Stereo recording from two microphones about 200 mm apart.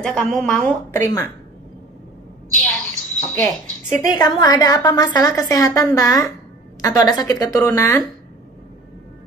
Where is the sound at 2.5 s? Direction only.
5° left (ahead or behind).